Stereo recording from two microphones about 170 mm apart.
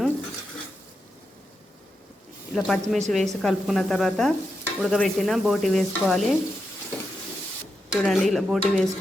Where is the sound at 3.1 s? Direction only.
Centre (ahead or behind).